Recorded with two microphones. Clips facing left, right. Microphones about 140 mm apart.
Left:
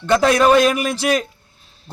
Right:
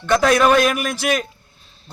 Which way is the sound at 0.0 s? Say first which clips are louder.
Left 1 dB; 30° left (ahead or behind).